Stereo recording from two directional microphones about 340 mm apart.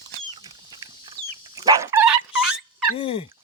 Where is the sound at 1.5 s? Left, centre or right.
Centre.